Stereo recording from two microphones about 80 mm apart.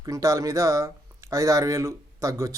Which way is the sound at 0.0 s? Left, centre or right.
Right.